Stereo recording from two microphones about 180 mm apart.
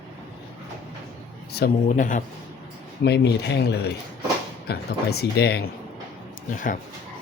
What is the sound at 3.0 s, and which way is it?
Speech, 70° left (ahead or behind).